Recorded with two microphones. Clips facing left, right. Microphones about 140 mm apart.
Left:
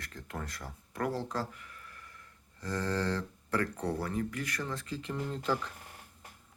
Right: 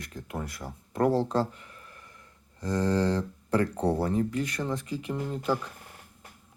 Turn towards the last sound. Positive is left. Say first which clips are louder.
# right 4 dB
turn(degrees=-10)  # may be behind; listen again after turning